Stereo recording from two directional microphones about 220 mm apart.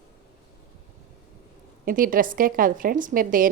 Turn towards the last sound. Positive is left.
turn(degrees=-40)  # may be behind; listen again after turning